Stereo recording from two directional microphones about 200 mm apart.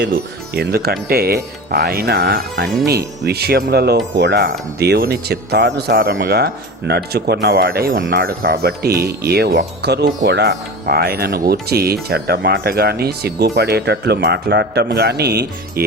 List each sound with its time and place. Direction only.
0.5 s a man's voice: 50° right (ahead or behind)